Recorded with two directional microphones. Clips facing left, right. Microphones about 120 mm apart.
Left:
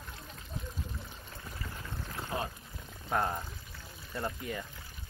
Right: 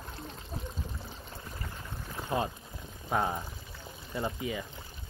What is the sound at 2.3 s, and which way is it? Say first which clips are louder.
Speech: right 5 dB; 25° right (ahead or behind).